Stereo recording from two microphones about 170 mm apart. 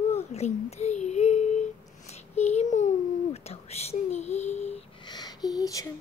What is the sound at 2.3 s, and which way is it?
Babbling, 40° left (ahead or behind).